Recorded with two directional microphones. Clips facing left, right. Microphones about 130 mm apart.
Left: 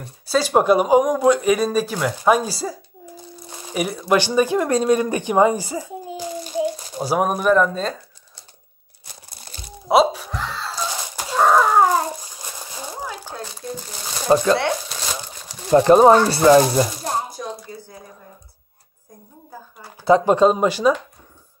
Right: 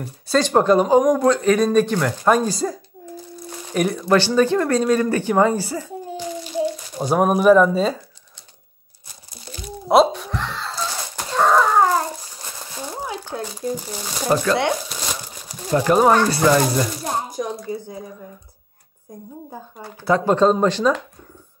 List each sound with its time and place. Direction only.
0.0 s speech: 5° left (ahead or behind)
3.0 s a sound: 10° left (ahead or behind)
3.4 s a child's voice: 10° left (ahead or behind)
9.8 s wail: centre (ahead or behind)
10.8 s a sound: 10° left (ahead or behind)
13.3 s crumpling: 15° right (ahead or behind)
14.3 s speech: 20° left (ahead or behind)
14.9 s crumpling: centre (ahead or behind)
15.7 s speech: 25° left (ahead or behind)
17.7 s speech: 20° right (ahead or behind)
20.1 s speech: 15° left (ahead or behind)